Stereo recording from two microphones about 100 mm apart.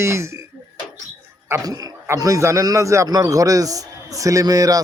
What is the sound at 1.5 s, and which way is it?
A man's voice, 40° right (ahead or behind).